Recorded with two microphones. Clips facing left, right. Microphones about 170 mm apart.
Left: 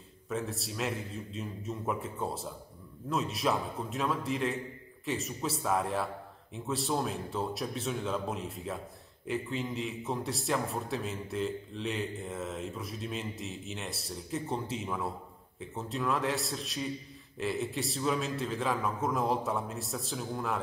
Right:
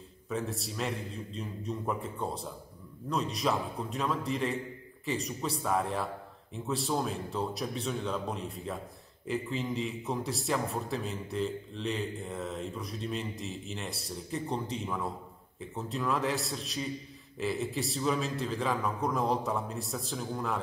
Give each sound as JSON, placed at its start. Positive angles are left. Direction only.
{"t": 0.3, "sound": "a man's voice", "side_deg": 0}